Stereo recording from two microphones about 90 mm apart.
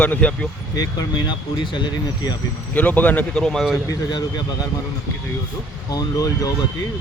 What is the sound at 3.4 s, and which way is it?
Speech, 5° left (ahead or behind).